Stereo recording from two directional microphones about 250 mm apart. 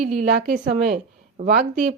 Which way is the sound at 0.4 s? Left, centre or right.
Right.